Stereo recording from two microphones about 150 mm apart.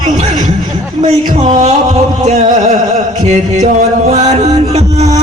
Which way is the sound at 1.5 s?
45° right (ahead or behind).